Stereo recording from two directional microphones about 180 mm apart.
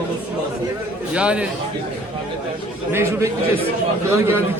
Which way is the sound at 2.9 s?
15° right (ahead or behind).